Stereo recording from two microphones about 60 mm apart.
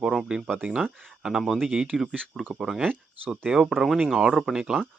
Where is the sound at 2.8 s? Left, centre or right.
Right.